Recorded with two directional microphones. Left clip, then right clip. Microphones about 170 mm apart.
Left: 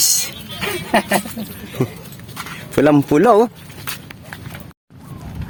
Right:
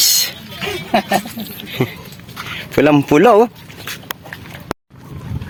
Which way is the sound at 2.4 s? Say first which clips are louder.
Right 2 dB; 5° left (ahead or behind).